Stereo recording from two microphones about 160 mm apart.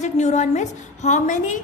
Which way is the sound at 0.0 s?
45° left (ahead or behind).